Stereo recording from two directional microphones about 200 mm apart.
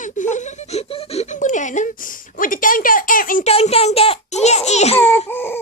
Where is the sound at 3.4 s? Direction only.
30° left (ahead or behind).